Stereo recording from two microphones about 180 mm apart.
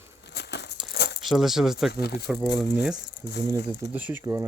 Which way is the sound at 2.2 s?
10° right (ahead or behind).